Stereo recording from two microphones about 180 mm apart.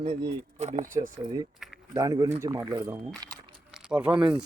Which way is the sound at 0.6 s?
40° right (ahead or behind).